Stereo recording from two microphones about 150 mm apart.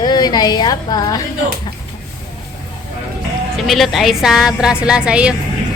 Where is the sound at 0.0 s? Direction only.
30° left (ahead or behind).